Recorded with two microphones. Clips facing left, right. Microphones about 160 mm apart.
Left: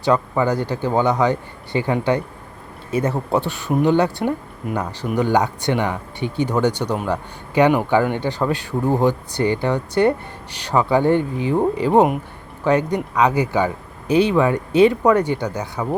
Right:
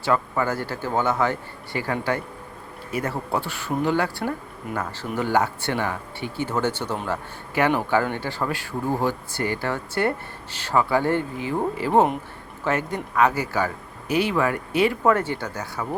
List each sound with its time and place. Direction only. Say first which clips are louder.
0.0 s speech: left 5 dB; 20° left (ahead or behind)